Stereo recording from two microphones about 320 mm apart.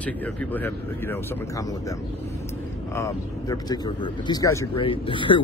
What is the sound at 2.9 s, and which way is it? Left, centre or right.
Speech, centre.